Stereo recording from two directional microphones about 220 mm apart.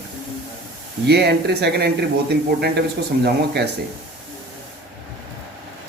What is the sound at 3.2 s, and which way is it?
Speech, 50° right (ahead or behind).